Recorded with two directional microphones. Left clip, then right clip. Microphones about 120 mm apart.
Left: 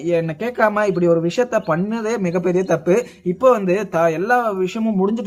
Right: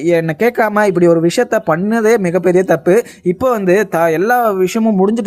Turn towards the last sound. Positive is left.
turn(degrees=-65)  # may be behind; listen again after turning